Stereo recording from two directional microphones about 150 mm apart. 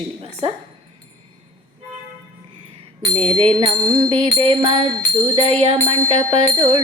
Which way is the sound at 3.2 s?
35° right (ahead or behind).